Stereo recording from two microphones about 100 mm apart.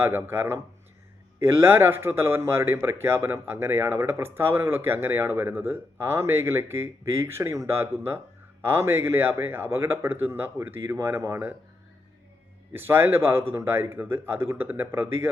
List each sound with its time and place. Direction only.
0.0 s speech: 20° right (ahead or behind)
12.7 s speech: 20° right (ahead or behind)